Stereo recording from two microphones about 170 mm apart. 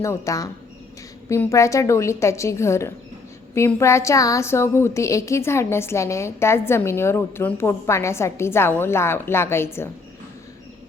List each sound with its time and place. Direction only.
0.0 s a woman's voice: 20° left (ahead or behind)